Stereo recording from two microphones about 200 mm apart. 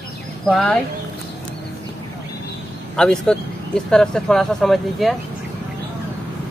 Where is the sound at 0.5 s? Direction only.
5° left (ahead or behind).